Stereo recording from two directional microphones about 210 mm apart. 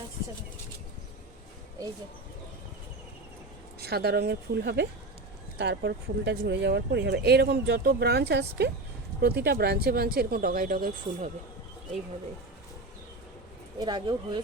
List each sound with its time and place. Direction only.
3.8 s speech: 50° right (ahead or behind)
13.7 s speech: 20° right (ahead or behind)